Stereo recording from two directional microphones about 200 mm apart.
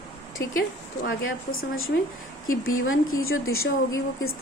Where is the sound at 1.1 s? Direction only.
85° left.